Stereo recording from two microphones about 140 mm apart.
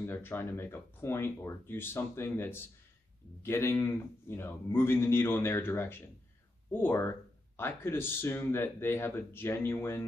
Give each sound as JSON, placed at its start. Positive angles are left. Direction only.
{"t": 0.0, "sound": "speech", "side_deg": 15}